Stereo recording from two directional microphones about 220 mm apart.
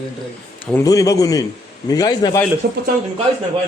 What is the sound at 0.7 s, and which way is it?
A man's voice, 15° left (ahead or behind).